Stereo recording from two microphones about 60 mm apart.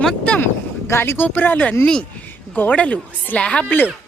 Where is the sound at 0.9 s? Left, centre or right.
Left.